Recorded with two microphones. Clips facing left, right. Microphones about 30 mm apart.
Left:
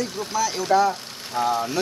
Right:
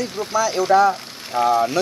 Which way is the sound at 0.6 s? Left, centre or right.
Centre.